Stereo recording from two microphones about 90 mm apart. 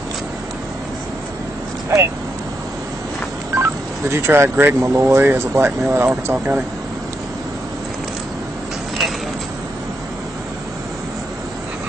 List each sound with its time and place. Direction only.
3.5 s speech: 30° right (ahead or behind)